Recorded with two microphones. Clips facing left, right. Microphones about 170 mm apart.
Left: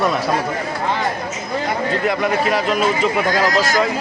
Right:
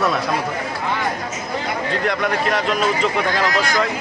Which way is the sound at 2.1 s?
5° left (ahead or behind).